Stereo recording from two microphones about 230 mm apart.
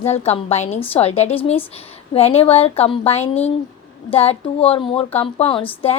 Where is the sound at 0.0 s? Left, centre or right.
Left.